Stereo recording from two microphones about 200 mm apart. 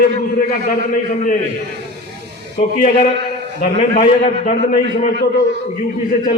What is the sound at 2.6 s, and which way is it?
A man's voice, 40° left (ahead or behind).